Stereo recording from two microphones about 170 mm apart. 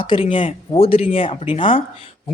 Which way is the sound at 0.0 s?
30° left (ahead or behind).